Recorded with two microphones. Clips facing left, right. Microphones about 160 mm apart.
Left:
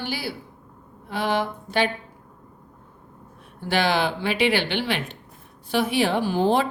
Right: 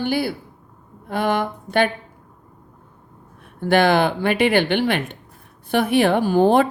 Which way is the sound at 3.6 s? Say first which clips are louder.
Right 6 dB; 50° right (ahead or behind).